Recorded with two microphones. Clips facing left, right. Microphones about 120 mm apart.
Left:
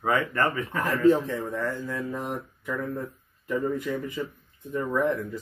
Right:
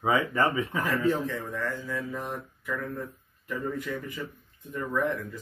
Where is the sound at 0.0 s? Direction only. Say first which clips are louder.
Even; 10° right (ahead or behind).